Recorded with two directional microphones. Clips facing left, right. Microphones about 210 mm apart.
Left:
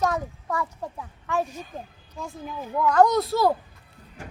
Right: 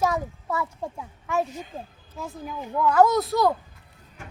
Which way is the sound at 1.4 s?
20° right (ahead or behind).